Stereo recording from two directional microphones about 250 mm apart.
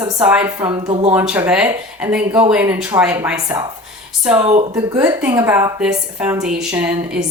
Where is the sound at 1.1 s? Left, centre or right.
Centre.